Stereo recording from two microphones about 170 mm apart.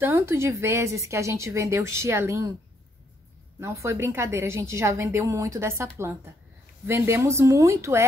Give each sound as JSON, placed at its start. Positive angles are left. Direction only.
{"t": 0.0, "sound": "a woman's voice", "side_deg": -15}
{"t": 3.5, "sound": "a woman's voice", "side_deg": -15}